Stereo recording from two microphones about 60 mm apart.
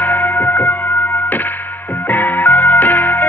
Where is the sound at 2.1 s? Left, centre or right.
Left.